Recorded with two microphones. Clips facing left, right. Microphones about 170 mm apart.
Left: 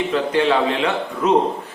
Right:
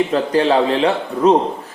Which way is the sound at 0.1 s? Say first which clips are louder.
Right 3 dB; 35° right (ahead or behind).